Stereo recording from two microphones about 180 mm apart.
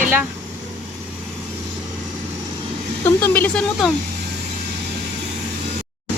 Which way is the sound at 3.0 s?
10° left (ahead or behind).